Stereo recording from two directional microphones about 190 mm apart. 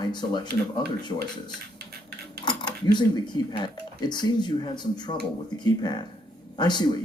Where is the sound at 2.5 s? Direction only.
25° left (ahead or behind).